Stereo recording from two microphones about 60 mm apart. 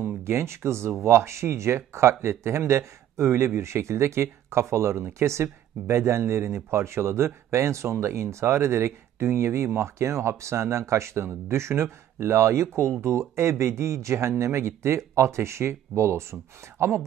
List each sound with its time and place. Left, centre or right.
0.2 s speech: right